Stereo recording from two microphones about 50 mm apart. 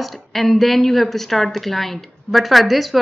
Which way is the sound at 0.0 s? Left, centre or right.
Centre.